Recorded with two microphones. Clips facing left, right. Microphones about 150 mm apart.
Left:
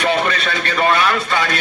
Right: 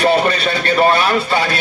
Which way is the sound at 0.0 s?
35° right (ahead or behind).